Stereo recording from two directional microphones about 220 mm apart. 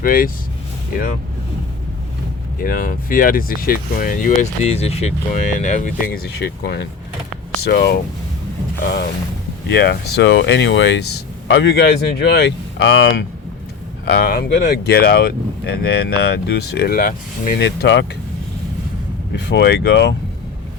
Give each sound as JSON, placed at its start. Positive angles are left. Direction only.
{"t": 0.0, "sound": "speech", "side_deg": 40}
{"t": 2.6, "sound": "speech", "side_deg": 40}
{"t": 19.4, "sound": "speech", "side_deg": 50}